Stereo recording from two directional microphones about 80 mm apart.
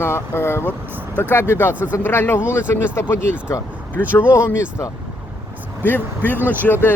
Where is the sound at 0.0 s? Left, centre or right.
Left.